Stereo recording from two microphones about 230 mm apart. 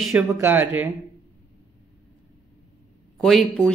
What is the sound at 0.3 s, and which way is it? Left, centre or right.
Speech, centre.